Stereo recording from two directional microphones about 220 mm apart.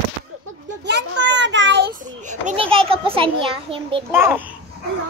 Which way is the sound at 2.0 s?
35° right (ahead or behind).